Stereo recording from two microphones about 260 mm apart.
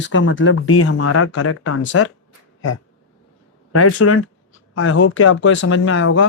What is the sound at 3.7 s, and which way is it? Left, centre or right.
Speech, left.